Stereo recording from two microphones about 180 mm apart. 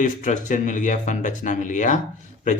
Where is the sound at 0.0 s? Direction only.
45° left (ahead or behind).